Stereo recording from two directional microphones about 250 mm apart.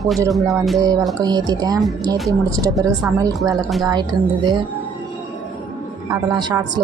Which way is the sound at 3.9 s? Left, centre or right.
Centre.